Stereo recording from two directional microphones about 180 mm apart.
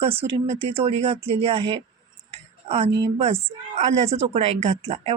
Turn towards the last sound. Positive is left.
turn(degrees=-35)  # may be behind; listen again after turning